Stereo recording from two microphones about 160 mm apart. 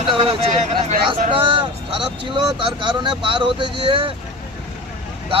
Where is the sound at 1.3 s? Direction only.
35° right (ahead or behind).